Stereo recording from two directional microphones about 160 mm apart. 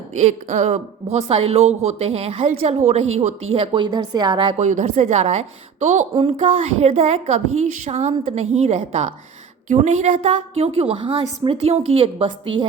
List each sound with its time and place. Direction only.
0.1 s speech: 45° right (ahead or behind)
3.8 s a woman's voice: 25° right (ahead or behind)
4.5 s a woman's voice: 45° right (ahead or behind); by 12.6 s 30° right (ahead or behind)